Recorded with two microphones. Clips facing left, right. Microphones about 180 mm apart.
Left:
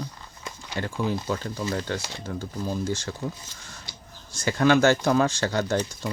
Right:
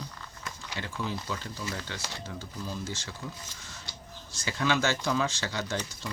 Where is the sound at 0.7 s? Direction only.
50° left (ahead or behind).